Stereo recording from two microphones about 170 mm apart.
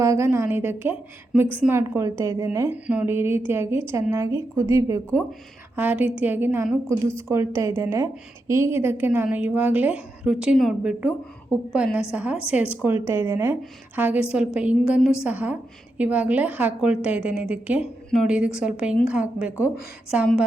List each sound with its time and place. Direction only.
0.0 s a woman's voice: 15° right (ahead or behind)